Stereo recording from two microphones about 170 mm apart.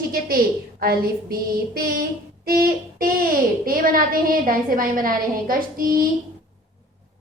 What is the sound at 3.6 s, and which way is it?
A woman's voice, 55° right (ahead or behind).